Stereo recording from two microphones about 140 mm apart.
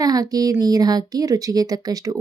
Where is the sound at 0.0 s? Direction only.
25° right (ahead or behind).